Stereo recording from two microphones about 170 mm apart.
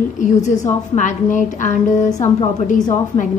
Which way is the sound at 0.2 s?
45° left (ahead or behind).